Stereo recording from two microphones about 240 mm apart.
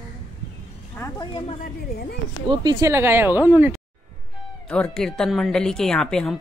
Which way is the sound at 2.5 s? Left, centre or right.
Centre.